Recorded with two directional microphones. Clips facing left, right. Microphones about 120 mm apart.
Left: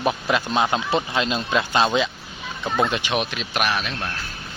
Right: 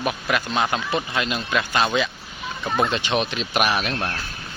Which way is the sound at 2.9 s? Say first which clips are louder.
Right 1 dB; 10° left (ahead or behind).